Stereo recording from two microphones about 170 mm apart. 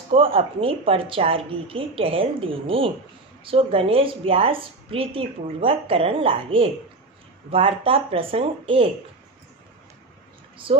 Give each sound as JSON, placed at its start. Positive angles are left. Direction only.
{"t": 0.1, "sound": "a woman's voice", "side_deg": -35}